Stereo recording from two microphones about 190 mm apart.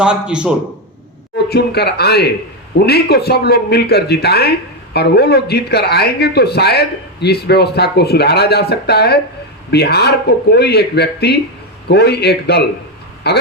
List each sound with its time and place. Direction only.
0.0 s a man's voice: 5° right (ahead or behind)
1.5 s speech: 60° left (ahead or behind)